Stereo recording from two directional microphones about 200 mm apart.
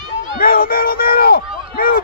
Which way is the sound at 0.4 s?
45° left (ahead or behind).